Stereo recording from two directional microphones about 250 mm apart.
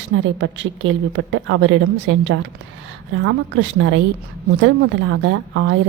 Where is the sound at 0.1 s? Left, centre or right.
Right.